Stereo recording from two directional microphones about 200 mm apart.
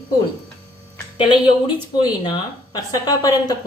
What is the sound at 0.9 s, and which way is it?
Speech, 25° left (ahead or behind).